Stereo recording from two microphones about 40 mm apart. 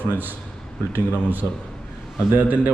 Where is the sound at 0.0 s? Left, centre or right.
Right.